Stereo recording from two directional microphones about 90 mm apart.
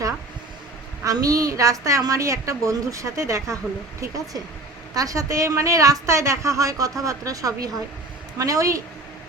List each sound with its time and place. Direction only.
1.0 s a woman's voice: 40° right (ahead or behind)